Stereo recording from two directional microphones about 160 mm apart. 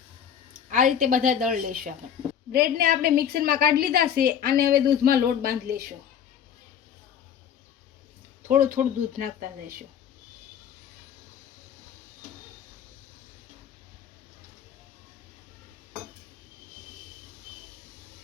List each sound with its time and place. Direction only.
0.7 s speech: 55° right (ahead or behind)
2.5 s a woman's voice: 75° right (ahead or behind)
8.4 s speech: 55° right (ahead or behind)